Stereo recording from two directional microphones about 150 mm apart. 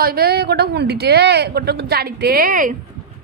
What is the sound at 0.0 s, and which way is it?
Speech, 90° right.